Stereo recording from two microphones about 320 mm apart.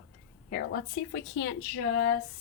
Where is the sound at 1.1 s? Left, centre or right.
Left.